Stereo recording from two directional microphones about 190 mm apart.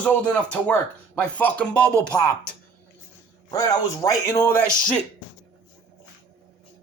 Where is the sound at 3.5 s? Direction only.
20° left (ahead or behind).